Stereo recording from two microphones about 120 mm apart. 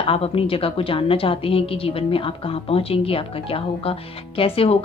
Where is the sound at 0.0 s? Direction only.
50° left (ahead or behind).